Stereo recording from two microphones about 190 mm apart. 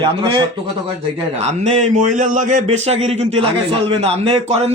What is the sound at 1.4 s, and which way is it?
A man's voice, 40° right (ahead or behind).